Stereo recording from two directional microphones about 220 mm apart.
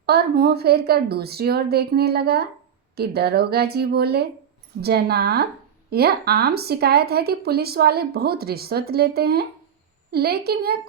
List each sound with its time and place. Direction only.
0.0 s speech: 45° right (ahead or behind)